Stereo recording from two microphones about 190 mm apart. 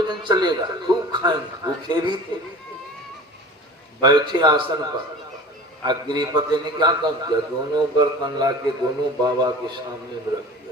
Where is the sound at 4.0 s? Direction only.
20° right (ahead or behind).